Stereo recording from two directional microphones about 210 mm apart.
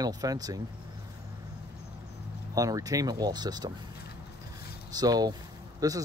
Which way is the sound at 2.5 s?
15° right (ahead or behind).